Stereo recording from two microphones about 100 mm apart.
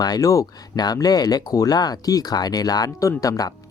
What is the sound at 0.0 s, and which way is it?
Speech, 40° left (ahead or behind).